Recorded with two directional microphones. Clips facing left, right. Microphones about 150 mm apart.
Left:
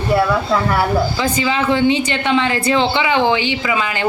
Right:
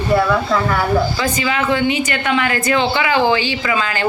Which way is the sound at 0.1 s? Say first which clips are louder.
Even; 10° left (ahead or behind).